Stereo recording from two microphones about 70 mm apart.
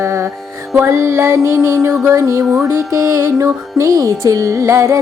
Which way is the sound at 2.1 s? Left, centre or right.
Right.